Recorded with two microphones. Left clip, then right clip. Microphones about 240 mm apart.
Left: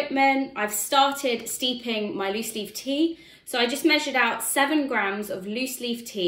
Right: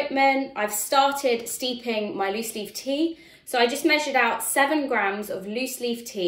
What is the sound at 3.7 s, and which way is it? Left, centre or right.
A woman's voice, centre.